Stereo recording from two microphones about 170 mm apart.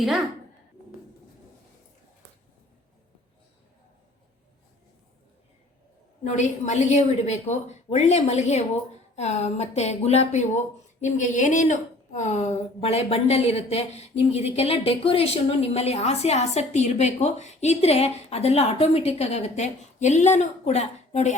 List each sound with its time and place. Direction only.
0.0 s speech: centre (ahead or behind)
6.2 s a woman's voice: 45° left (ahead or behind)